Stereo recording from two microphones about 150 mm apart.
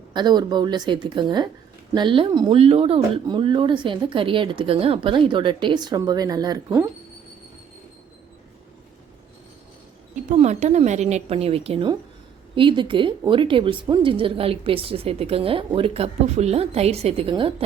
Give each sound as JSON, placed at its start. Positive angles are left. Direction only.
{"t": 0.1, "sound": "a woman's voice", "side_deg": -30}
{"t": 2.6, "sound": "a woman's voice", "side_deg": -40}
{"t": 10.3, "sound": "a woman's voice", "side_deg": -50}